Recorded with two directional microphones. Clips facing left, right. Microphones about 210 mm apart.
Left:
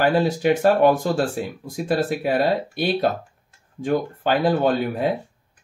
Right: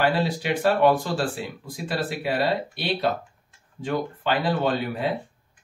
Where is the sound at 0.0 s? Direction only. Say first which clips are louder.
Left 5 dB; 45° left (ahead or behind).